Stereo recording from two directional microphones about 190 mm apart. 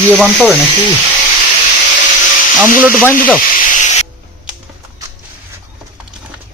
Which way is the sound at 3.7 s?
40° left (ahead or behind).